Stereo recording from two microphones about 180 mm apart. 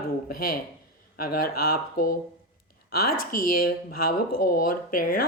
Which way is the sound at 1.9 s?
55° left (ahead or behind).